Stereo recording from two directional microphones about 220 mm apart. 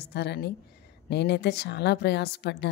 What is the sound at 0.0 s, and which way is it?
A woman's voice, 50° left (ahead or behind).